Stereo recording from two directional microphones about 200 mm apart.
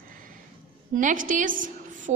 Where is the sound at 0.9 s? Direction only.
40° right (ahead or behind).